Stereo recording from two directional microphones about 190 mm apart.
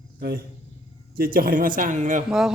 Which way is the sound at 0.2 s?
55° right (ahead or behind).